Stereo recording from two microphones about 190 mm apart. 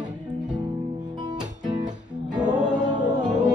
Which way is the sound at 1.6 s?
20° right (ahead or behind).